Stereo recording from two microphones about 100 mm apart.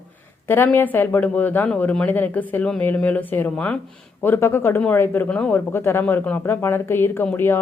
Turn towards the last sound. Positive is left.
turn(degrees=20)  # may be behind; listen again after turning